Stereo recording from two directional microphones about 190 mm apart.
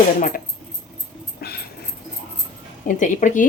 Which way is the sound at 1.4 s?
55° left (ahead or behind).